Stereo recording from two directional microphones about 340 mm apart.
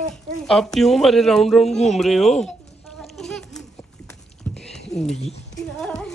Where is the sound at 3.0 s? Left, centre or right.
Centre.